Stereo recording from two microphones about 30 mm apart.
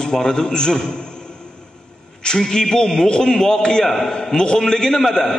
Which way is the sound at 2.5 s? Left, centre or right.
Left.